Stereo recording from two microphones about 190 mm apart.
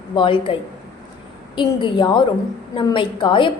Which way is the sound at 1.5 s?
25° left (ahead or behind).